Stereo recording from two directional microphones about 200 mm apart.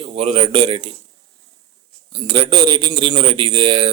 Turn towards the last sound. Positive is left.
turn(degrees=-25)  # may be behind; listen again after turning